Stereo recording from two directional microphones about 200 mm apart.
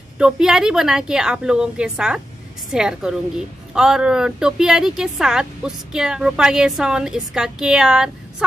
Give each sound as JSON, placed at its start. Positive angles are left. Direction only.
{"t": 0.2, "sound": "a woman's voice", "side_deg": -5}